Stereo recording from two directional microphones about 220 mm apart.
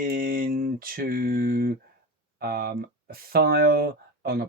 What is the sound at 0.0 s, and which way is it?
Speech, 40° right (ahead or behind).